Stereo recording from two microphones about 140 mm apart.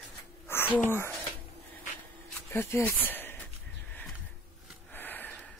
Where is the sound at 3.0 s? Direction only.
15° left (ahead or behind).